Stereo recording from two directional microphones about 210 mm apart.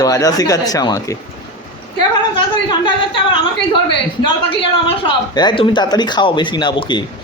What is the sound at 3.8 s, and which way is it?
Speech, 25° left (ahead or behind).